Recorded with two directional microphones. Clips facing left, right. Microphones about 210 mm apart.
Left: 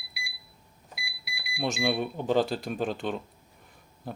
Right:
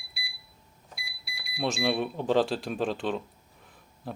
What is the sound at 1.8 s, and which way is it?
Speech, centre (ahead or behind).